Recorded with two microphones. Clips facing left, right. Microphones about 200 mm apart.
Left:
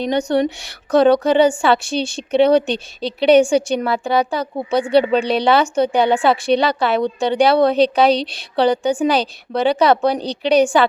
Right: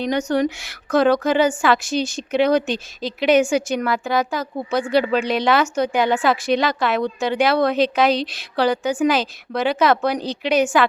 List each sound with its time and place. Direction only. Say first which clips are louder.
0.0 s a woman's voice: left 2 dB; 30° left (ahead or behind)